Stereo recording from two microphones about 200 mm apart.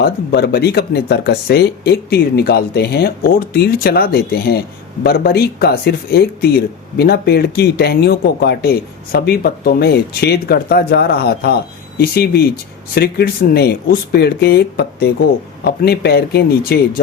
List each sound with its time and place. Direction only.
0.0 s speech: 55° left (ahead or behind)